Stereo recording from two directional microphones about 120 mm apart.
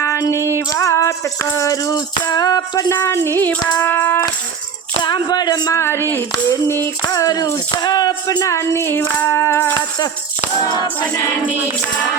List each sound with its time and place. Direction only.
0.0 s female singing: 25° left (ahead or behind)
0.7 s music: 25° left (ahead or behind)
3.7 s speech: 15° left (ahead or behind)
4.9 s speech: 40° left (ahead or behind)
5.8 s music: 20° left (ahead or behind)
7.1 s music: 30° left (ahead or behind)